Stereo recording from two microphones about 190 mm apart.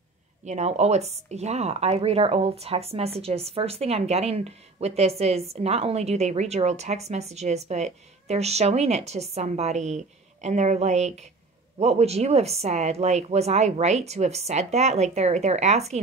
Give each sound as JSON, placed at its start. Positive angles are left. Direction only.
{"t": 0.5, "sound": "speech", "side_deg": -35}